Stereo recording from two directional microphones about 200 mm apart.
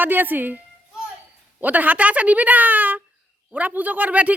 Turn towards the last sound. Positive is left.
turn(degrees=-5)  # may be behind; listen again after turning